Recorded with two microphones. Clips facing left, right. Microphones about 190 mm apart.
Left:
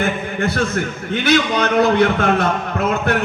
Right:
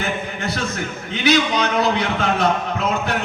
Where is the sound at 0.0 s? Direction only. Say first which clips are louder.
Left 5 dB; 55° left (ahead or behind).